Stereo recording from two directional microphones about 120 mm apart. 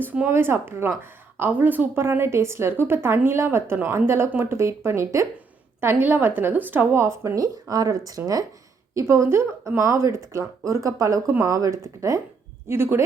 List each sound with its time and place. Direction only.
0.0 s a woman's voice: 15° right (ahead or behind)